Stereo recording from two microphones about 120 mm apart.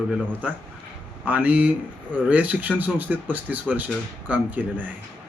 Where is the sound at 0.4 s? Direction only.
10° right (ahead or behind).